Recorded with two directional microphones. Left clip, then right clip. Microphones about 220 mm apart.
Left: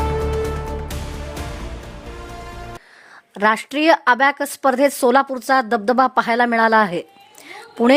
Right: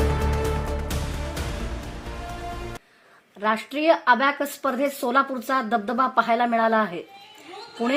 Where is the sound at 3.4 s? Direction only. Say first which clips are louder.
Left 5 dB; 50° left (ahead or behind).